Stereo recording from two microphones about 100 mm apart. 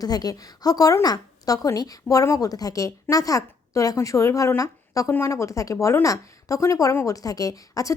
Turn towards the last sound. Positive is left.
turn(degrees=35)  # may be behind; listen again after turning